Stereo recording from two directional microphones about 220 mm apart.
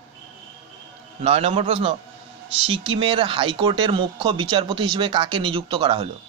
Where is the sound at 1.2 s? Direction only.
25° right (ahead or behind).